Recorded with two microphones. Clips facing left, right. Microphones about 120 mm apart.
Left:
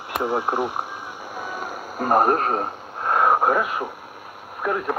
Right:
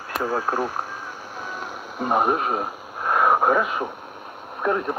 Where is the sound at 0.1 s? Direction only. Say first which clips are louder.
Left 1 dB; 20° left (ahead or behind).